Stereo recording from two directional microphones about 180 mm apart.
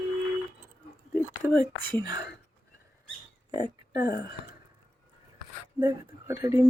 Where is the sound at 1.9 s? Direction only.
20° right (ahead or behind).